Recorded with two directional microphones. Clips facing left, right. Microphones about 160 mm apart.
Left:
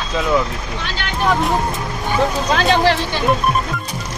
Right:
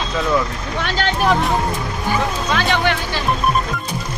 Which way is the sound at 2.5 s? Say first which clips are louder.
Left 4 dB; 35° left (ahead or behind).